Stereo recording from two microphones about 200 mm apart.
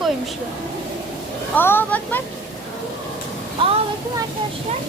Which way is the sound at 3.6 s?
25° right (ahead or behind).